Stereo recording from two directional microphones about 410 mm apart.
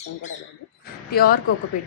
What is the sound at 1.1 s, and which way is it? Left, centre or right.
Speech, left.